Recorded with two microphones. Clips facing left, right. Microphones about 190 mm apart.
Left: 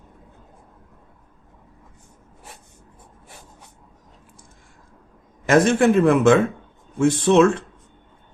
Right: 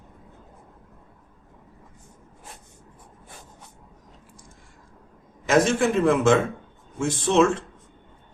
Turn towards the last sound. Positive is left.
turn(degrees=60)  # may be behind; listen again after turning